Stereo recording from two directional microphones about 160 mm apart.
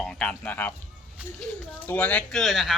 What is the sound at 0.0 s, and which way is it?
Music, 5° left (ahead or behind).